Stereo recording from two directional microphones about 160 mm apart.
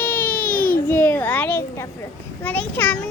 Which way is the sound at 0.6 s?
65° left (ahead or behind).